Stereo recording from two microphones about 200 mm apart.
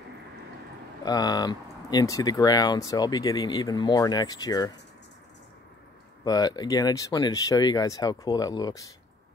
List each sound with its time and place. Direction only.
1.0 s speech: 20° left (ahead or behind)
6.2 s speech: 20° left (ahead or behind)